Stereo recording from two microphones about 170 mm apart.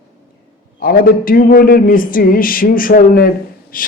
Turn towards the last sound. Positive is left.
turn(degrees=55)  # may be behind; listen again after turning